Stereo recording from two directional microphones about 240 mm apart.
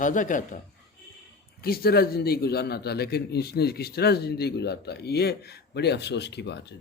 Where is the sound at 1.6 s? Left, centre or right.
Left.